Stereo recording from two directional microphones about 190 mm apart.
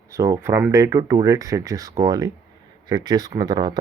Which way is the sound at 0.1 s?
15° right (ahead or behind).